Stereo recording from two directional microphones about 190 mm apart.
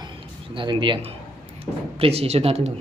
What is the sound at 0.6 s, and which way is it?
Speech, 25° right (ahead or behind).